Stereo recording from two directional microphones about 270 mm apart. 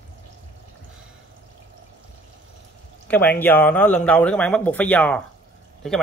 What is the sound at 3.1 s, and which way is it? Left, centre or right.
Speech, centre.